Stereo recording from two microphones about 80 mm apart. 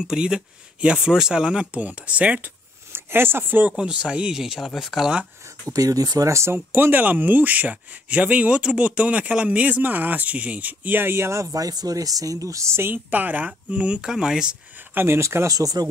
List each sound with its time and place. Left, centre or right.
0.1 s speech: centre
2.9 s speech: right
3.7 s speech: centre
5.7 s speech: right; by 14.6 s centre
15.0 s speech: right